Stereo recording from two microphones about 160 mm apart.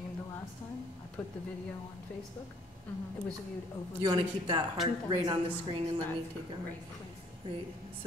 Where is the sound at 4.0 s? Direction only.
30° right (ahead or behind).